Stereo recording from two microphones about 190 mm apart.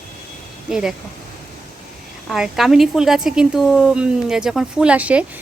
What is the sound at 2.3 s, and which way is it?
A woman's voice, centre (ahead or behind).